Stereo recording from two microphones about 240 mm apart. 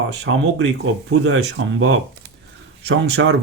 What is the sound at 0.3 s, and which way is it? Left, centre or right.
Speech, right.